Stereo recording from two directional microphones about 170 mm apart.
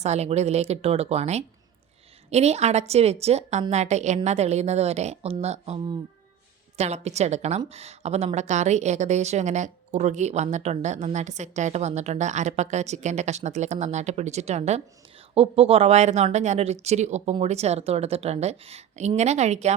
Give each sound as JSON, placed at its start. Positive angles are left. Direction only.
{"t": 0.0, "sound": "a woman's voice", "side_deg": -40}